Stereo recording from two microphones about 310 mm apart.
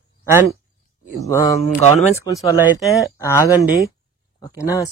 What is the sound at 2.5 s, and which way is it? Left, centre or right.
Speech, centre.